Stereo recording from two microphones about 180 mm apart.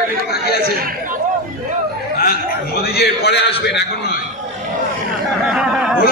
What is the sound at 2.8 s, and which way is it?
A man's voice, 60° left (ahead or behind).